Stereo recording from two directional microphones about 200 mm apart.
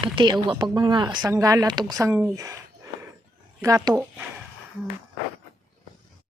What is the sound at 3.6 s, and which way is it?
Speech, 15° right (ahead or behind).